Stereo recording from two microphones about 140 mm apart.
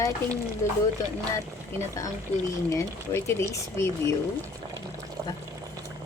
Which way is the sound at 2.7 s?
20° left (ahead or behind).